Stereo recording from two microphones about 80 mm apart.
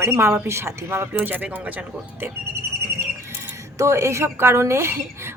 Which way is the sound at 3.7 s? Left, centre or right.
Right.